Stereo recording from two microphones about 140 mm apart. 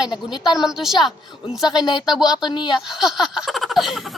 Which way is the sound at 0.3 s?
5° right (ahead or behind).